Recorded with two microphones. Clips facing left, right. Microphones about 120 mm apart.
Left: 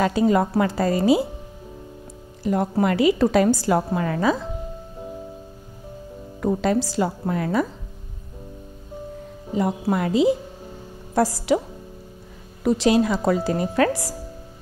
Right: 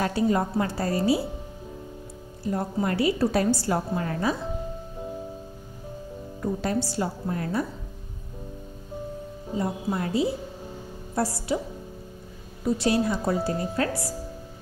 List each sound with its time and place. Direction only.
0.0 s a woman's voice: 90° left
2.4 s a woman's voice: 90° left
6.4 s a woman's voice: 90° left
9.6 s a woman's voice: 90° left
12.6 s a woman's voice: 90° left